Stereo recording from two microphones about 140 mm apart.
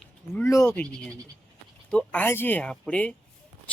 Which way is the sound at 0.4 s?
20° left (ahead or behind).